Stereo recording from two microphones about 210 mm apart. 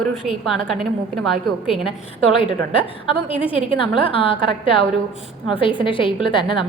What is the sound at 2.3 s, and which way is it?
A woman's voice, 25° left (ahead or behind).